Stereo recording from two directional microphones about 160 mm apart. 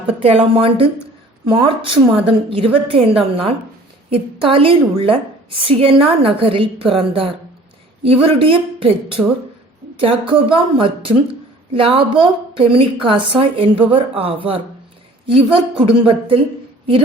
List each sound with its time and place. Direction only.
0.2 s a woman's voice: 35° right (ahead or behind)
9.2 s speech: 10° right (ahead or behind)
10.0 s a woman's voice: 35° right (ahead or behind)